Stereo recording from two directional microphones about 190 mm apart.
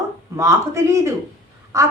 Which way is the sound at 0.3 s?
15° right (ahead or behind).